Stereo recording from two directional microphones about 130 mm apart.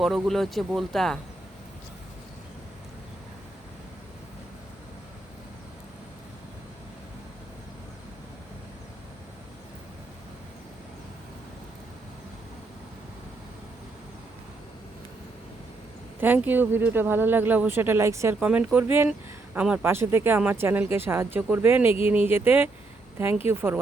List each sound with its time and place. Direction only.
0.0 s speech: centre (ahead or behind)
16.2 s speech: 15° right (ahead or behind)
18.3 s a woman's voice: 10° right (ahead or behind)